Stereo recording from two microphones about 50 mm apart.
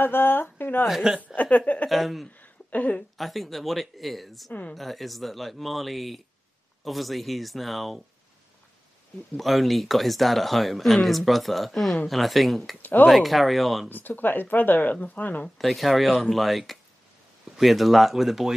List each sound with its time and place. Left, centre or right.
0.0 s speech: left
0.8 s speech: centre
1.3 s a sound: left
1.9 s speech: centre
2.3 s a sound: left
3.2 s speech: centre
4.5 s speech: left
4.7 s speech: centre
9.4 s speech: centre
13.8 s speech: left
15.5 s speech: centre